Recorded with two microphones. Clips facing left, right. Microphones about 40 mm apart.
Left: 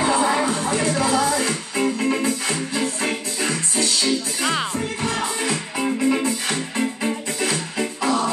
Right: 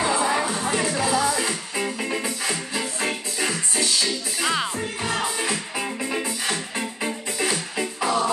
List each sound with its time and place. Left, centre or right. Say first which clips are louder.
0.0 s music: left 3 dB; centre
5.0 s music: even; centre
8.0 s music: left 1 dB; centre